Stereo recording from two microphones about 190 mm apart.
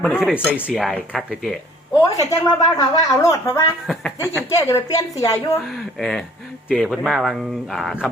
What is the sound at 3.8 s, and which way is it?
Speech, centre (ahead or behind).